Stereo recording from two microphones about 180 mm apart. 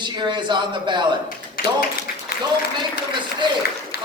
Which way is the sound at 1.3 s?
50° left (ahead or behind).